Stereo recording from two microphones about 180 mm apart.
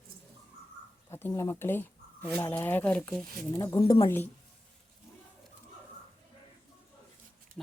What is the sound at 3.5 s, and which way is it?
Speech, 20° left (ahead or behind).